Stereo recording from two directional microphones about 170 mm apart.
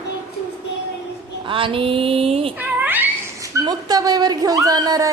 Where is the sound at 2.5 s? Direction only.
10° right (ahead or behind).